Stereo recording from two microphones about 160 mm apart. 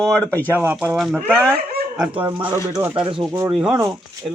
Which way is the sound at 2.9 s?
30° right (ahead or behind).